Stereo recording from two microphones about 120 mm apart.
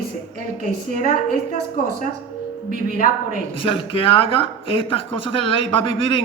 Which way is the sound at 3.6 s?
50° left (ahead or behind).